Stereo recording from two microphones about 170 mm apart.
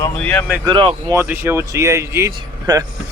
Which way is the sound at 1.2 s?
15° right (ahead or behind).